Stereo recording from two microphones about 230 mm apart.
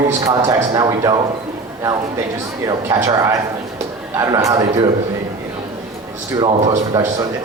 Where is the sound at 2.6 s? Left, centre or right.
Centre.